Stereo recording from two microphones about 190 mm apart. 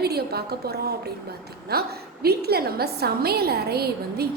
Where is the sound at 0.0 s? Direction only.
55° right (ahead or behind).